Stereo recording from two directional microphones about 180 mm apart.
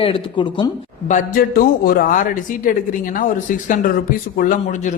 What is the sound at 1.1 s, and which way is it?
A man's voice, 45° left (ahead or behind).